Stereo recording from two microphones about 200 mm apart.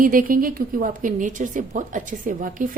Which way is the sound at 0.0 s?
45° right (ahead or behind).